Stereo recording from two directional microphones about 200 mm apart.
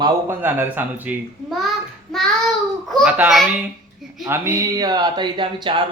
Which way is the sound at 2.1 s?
Centre (ahead or behind).